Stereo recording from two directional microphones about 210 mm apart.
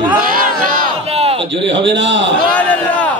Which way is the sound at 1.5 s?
60° right (ahead or behind).